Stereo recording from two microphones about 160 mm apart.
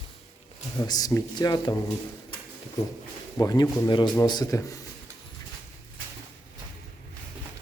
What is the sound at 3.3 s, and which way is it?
Speech, 20° left (ahead or behind).